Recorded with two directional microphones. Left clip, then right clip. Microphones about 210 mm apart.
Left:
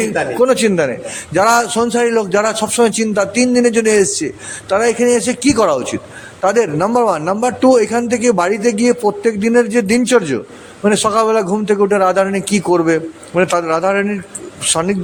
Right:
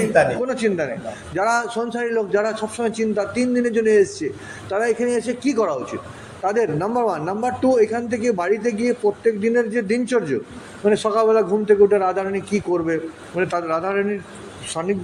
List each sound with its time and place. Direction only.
0.4 s a man's voice: 50° left (ahead or behind)